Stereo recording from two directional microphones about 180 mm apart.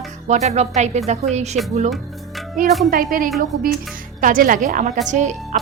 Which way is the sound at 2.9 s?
50° right (ahead or behind).